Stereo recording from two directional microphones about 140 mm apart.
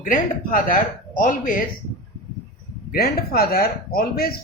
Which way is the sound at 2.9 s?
90° left.